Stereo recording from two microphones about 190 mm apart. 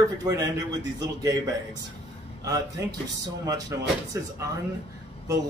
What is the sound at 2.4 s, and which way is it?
Speech, 20° right (ahead or behind).